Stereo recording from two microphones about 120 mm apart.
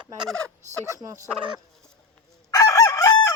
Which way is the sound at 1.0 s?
25° right (ahead or behind).